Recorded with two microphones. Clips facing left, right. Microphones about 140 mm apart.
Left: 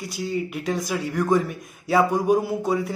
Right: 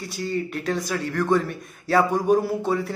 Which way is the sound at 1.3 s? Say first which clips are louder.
Left 1 dB; 15° left (ahead or behind).